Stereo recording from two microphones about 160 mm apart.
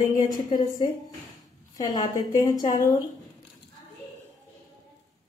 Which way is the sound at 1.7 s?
25° left (ahead or behind).